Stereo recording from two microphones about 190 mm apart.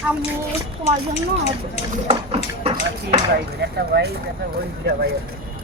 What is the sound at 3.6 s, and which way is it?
Speech, 60° right (ahead or behind).